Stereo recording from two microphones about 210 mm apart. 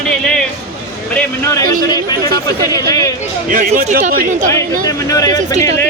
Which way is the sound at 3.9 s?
35° right (ahead or behind).